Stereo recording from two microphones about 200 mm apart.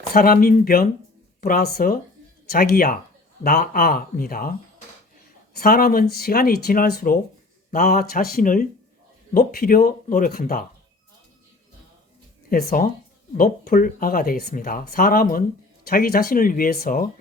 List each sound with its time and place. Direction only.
0.1 s speech: 45° left (ahead or behind)
5.5 s speech: 45° left (ahead or behind)
12.5 s speech: 45° left (ahead or behind)